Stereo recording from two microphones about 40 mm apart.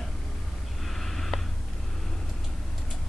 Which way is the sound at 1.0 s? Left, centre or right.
Centre.